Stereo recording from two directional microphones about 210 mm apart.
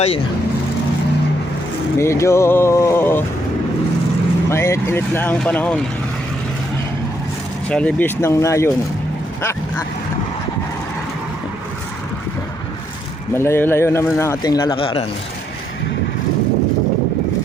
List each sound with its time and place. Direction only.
2.0 s speech: 15° left (ahead or behind)
4.4 s speech: 15° left (ahead or behind)
7.7 s speech: 5° left (ahead or behind)
13.3 s a man's voice: 10° left (ahead or behind)